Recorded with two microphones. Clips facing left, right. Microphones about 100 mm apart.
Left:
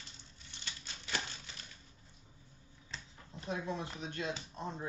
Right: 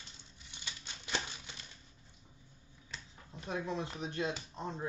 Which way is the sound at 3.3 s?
25° left (ahead or behind).